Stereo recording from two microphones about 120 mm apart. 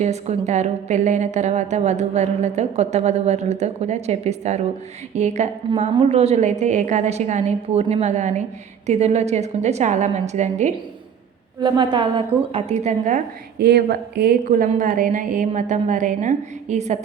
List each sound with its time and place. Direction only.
0.0 s a woman's voice: 70° right (ahead or behind)
11.6 s a woman's voice: 45° right (ahead or behind); by 13.2 s 85° right
14.8 s a woman's voice: 90° right